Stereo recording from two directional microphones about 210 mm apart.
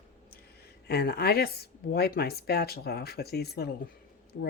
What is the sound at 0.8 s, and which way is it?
Speech, 50° left (ahead or behind).